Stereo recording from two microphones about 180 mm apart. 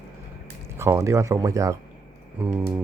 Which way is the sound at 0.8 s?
15° right (ahead or behind).